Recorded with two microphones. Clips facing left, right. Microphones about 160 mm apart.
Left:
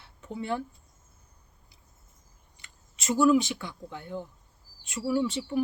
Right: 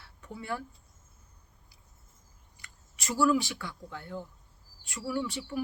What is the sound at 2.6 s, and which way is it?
Speech, 20° left (ahead or behind).